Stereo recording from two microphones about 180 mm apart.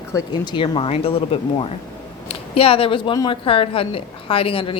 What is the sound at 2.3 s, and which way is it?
Speech, 30° left (ahead or behind).